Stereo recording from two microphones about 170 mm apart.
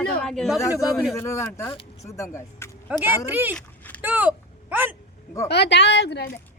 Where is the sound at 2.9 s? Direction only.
10° right (ahead or behind).